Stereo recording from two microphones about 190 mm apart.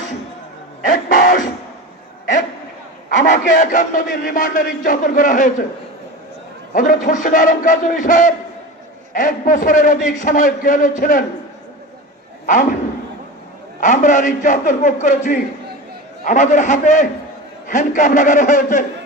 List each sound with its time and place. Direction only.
0.9 s music: 45° left (ahead or behind)
3.1 s a man's voice: 40° left (ahead or behind)
6.7 s speech: 45° left (ahead or behind)
13.7 s a man's voice: 40° left (ahead or behind)